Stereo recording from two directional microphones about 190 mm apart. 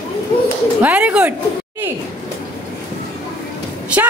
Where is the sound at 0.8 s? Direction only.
10° right (ahead or behind).